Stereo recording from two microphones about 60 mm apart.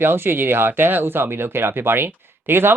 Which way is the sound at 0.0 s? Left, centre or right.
Right.